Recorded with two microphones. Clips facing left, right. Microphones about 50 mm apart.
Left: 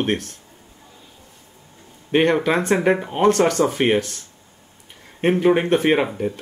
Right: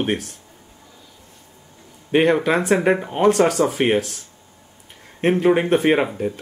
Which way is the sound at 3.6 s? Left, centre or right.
Right.